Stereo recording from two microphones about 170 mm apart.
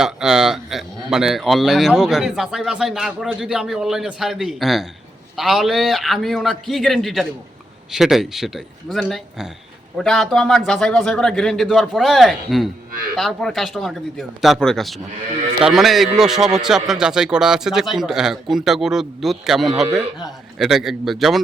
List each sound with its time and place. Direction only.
0.0 s a man's voice: 5° right (ahead or behind)